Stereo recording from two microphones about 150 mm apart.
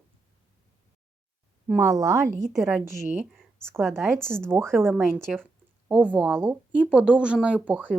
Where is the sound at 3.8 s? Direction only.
Centre (ahead or behind).